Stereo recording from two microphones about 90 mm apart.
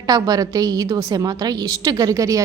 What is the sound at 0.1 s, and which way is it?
A woman's voice, 45° right (ahead or behind).